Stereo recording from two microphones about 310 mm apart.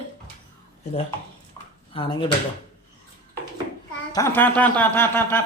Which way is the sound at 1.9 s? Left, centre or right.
Centre.